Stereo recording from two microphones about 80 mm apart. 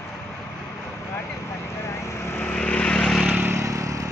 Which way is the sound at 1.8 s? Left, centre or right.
Left.